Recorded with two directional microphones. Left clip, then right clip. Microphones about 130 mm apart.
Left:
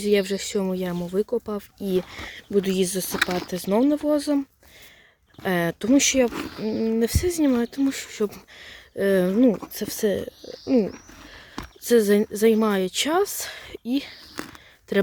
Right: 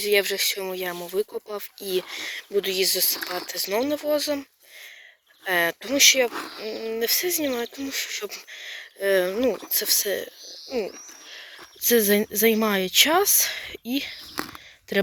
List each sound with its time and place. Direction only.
0.0 s speech: 20° left (ahead or behind)
2.6 s speech: 30° left (ahead or behind)
5.5 s speech: 25° left (ahead or behind)
10.7 s speech: 40° left (ahead or behind)